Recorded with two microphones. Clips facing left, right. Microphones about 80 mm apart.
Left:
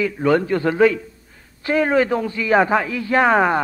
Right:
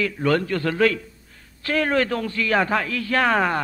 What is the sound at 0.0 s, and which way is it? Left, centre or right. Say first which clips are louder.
A man's voice: left 4 dB; centre.